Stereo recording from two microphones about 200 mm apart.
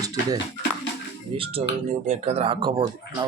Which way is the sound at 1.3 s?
30° right (ahead or behind).